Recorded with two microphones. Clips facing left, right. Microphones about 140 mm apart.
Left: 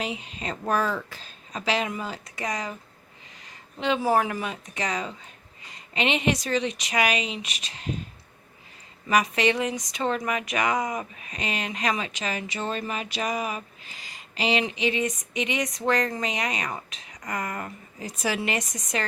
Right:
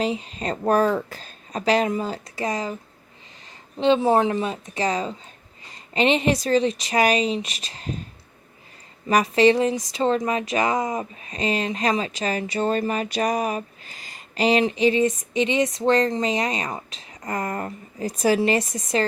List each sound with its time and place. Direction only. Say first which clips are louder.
0.0 s speech: right 7 dB; 35° right (ahead or behind)
3.8 s a woman's voice: right 5 dB; 30° right (ahead or behind)
9.0 s speech: right 6 dB; 35° right (ahead or behind)